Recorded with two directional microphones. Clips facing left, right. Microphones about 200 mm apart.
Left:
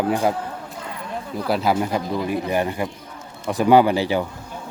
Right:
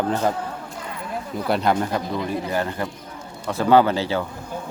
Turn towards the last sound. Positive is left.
turn(degrees=15)  # may be behind; listen again after turning